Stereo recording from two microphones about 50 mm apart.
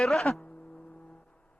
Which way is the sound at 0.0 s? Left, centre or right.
Centre.